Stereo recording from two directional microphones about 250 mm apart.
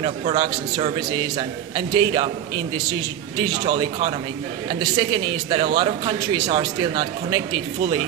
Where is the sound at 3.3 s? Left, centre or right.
Centre.